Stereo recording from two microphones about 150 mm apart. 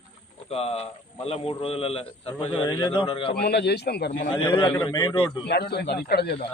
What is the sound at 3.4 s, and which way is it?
Speech, 90° left.